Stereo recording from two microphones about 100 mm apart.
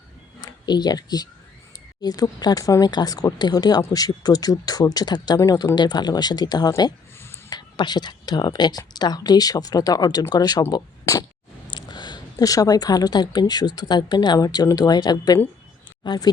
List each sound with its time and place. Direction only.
0.4 s a woman's voice: 45° left (ahead or behind)